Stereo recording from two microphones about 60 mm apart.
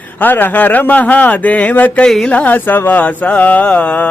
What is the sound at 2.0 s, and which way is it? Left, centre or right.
Speech, centre.